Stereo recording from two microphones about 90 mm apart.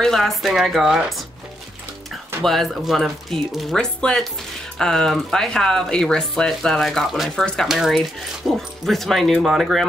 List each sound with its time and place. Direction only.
0.0 s speech: 5° left (ahead or behind)
2.4 s speech: centre (ahead or behind)